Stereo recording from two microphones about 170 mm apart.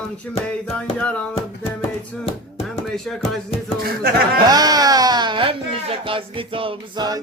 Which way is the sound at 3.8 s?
60° right (ahead or behind).